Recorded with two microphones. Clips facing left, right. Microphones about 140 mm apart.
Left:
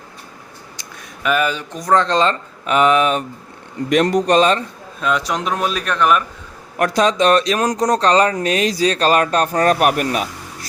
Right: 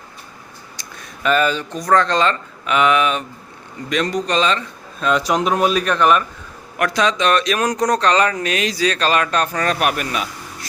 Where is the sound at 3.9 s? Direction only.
55° left (ahead or behind).